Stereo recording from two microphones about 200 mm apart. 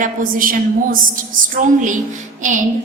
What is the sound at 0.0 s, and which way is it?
A woman's voice, 45° right (ahead or behind).